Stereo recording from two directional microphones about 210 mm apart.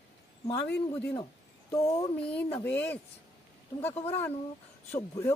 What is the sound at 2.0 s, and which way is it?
A man's voice, 10° left (ahead or behind).